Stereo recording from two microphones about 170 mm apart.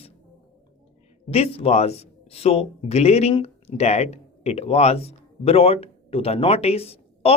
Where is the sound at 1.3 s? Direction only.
35° left (ahead or behind).